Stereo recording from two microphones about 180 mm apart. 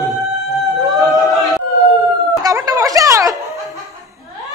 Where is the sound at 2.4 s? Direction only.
20° right (ahead or behind).